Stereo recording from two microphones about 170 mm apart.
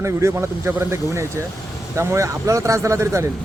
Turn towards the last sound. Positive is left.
turn(degrees=-15)  # may be behind; listen again after turning